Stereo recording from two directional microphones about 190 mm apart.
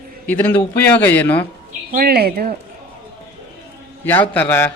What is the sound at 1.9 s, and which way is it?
Speech, 55° right (ahead or behind).